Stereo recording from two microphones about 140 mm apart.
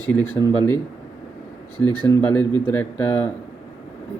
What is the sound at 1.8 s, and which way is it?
Speech, 10° left (ahead or behind).